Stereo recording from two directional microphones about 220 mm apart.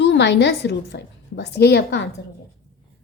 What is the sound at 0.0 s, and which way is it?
A woman's voice, 50° left (ahead or behind).